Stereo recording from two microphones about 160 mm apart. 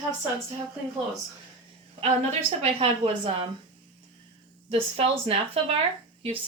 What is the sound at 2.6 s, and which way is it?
Speech, 35° right (ahead or behind).